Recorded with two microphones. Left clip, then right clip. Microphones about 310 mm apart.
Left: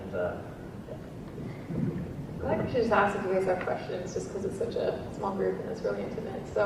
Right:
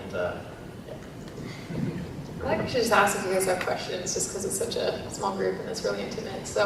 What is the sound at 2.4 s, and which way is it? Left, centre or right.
A woman's voice, centre.